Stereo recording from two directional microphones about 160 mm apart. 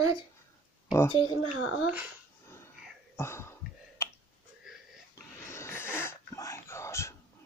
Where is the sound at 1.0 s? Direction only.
30° left (ahead or behind).